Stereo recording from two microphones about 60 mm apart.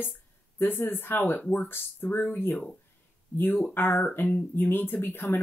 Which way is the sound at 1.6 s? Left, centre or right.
Left.